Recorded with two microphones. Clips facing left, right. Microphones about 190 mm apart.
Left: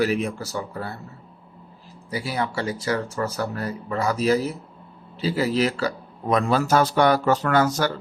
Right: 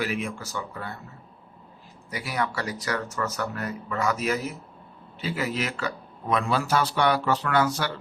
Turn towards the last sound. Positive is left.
turn(degrees=45)  # may be behind; listen again after turning